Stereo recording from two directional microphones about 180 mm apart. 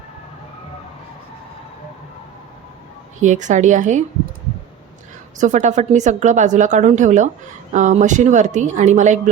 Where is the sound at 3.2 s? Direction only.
45° right (ahead or behind).